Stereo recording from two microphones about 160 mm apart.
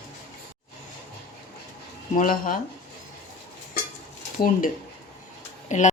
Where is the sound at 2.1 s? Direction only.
55° left (ahead or behind).